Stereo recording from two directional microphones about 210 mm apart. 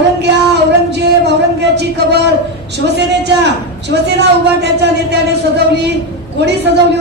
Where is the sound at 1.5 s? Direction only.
55° right (ahead or behind).